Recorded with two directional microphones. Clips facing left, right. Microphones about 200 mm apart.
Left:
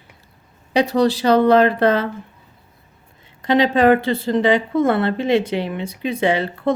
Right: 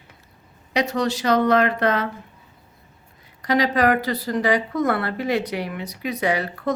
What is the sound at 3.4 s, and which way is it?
A woman's voice, 25° left (ahead or behind).